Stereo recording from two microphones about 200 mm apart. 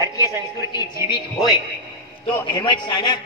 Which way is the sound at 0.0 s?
15° right (ahead or behind).